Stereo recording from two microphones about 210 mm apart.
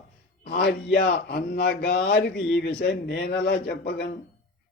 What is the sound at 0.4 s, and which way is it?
A man's voice, 50° left (ahead or behind).